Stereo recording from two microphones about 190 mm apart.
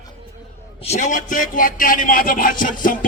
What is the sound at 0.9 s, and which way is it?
Music, 40° left (ahead or behind).